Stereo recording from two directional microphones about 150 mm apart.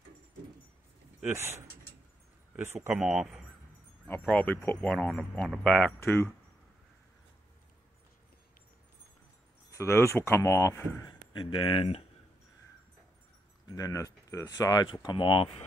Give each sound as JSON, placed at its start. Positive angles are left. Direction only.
{"t": 1.2, "sound": "speech", "side_deg": -15}
{"t": 3.0, "sound": "speech", "side_deg": -5}
{"t": 9.7, "sound": "speech", "side_deg": 20}
{"t": 11.1, "sound": "speech", "side_deg": 35}
{"t": 13.7, "sound": "speech", "side_deg": 25}